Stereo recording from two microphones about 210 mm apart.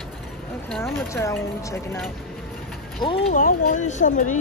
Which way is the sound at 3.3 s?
40° left (ahead or behind).